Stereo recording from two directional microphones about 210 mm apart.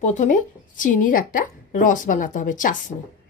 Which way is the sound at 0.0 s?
35° left (ahead or behind).